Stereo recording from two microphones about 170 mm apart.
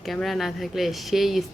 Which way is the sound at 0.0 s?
Centre (ahead or behind).